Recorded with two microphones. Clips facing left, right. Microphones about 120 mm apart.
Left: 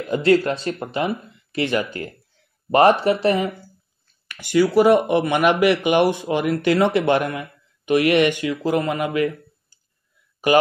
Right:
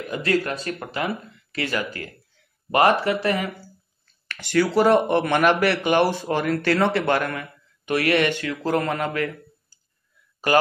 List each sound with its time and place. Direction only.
0.1 s speech: 30° left (ahead or behind)
4.3 s speech: 10° left (ahead or behind)